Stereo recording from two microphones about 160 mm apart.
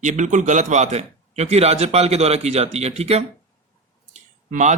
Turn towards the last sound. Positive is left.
turn(degrees=-50)  # may be behind; listen again after turning